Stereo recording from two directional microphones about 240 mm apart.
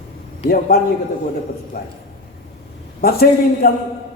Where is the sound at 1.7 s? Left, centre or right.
Left.